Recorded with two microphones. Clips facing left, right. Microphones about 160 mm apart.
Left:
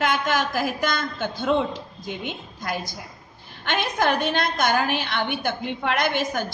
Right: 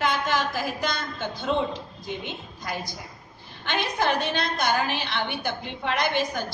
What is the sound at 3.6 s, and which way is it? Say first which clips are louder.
A woman's voice: left 3 dB; 55° left (ahead or behind).